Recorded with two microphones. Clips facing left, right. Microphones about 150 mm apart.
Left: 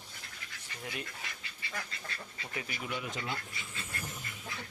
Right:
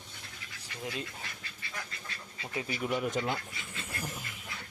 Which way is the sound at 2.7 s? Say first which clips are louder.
Right 9 dB; 45° right (ahead or behind).